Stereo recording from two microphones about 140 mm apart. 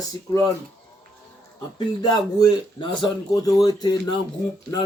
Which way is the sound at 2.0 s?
30° left (ahead or behind).